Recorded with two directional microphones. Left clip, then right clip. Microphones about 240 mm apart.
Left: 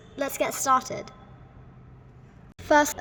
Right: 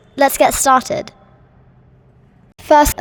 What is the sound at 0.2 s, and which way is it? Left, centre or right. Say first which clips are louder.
Speech: right 15 dB; right.